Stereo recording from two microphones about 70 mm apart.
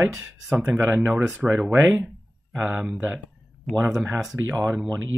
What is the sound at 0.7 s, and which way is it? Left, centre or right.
Speech, right.